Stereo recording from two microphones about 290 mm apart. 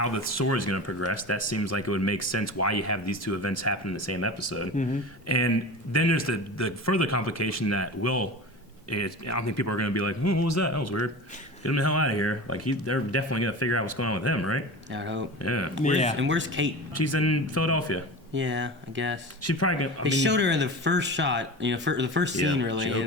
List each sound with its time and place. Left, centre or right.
0.0 s speech: left
14.8 s speech: right
15.4 s speech: left
15.8 s speech: left
16.1 s speech: right
16.9 s speech: left
18.3 s speech: right
19.4 s speech: left
20.0 s speech: right